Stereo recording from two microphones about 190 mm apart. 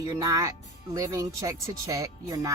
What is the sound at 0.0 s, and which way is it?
Speech, 20° right (ahead or behind).